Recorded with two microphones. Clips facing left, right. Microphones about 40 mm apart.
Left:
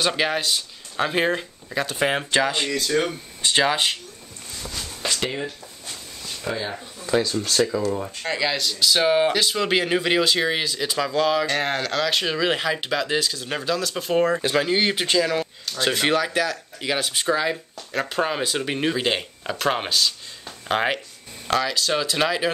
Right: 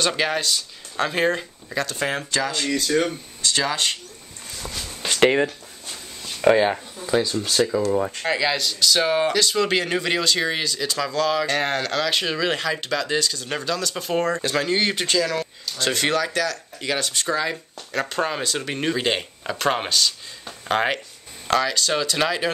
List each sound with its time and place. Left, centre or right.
0.0 s speech: centre; by 2.7 s left
2.7 s speech: centre
3.4 s speech: left
5.2 s speech: right
6.5 s speech: right
7.1 s speech: centre